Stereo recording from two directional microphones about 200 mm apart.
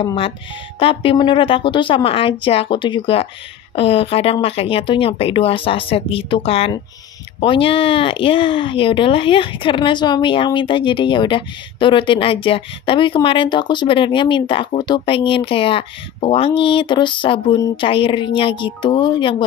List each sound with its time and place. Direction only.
0.0 s speech: 25° left (ahead or behind)